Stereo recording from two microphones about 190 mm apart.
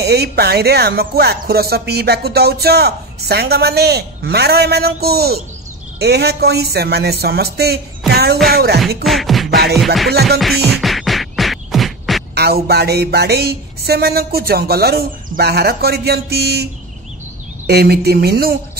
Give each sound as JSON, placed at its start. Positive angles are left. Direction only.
{"t": 0.0, "sound": "speech", "side_deg": -60}
{"t": 8.7, "sound": "beatboxing", "side_deg": 0}
{"t": 10.4, "sound": "music", "side_deg": 0}
{"t": 12.4, "sound": "speech", "side_deg": -55}
{"t": 17.6, "sound": "speech", "side_deg": -55}